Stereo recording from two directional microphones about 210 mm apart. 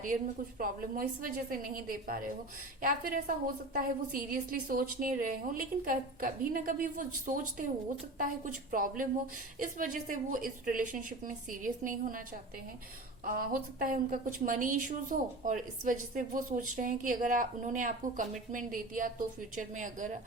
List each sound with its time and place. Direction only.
0.6 s a woman's voice: 40° right (ahead or behind)
13.2 s a woman's voice: 45° right (ahead or behind)